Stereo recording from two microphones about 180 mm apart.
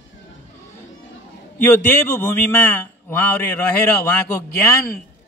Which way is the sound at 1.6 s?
15° left (ahead or behind).